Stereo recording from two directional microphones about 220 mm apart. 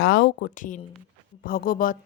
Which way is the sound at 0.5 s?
35° left (ahead or behind).